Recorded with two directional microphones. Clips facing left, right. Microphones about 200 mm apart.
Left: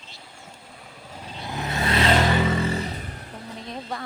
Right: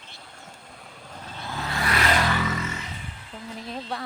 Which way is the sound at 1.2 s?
15° left (ahead or behind).